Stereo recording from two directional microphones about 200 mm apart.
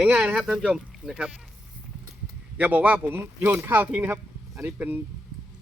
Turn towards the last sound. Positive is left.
turn(degrees=-10)  # may be behind; listen again after turning